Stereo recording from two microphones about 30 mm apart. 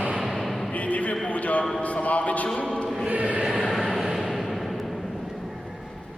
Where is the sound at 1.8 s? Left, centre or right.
Left.